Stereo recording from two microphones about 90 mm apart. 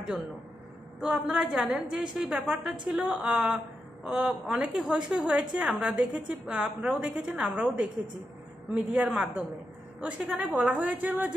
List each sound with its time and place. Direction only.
1.0 s a woman's voice: 5° right (ahead or behind)